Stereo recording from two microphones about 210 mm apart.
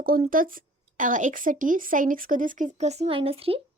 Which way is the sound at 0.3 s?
40° right (ahead or behind).